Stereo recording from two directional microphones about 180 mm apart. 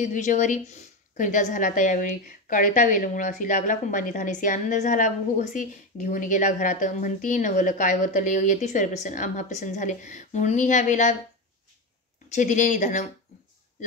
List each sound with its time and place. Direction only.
0.0 s a woman's voice: 45° left (ahead or behind)
12.3 s a woman's voice: 40° left (ahead or behind)